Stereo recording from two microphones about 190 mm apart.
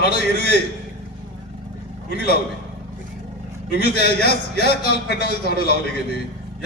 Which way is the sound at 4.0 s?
55° left (ahead or behind).